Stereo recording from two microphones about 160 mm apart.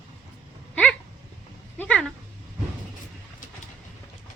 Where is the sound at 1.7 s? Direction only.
10° left (ahead or behind).